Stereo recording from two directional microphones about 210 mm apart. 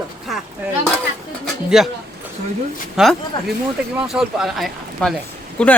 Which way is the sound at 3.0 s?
Centre (ahead or behind).